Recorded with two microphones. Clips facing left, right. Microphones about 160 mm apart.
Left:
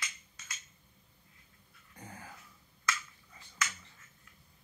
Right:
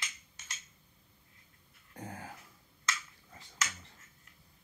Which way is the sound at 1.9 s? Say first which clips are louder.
Right 5 dB; 50° right (ahead or behind).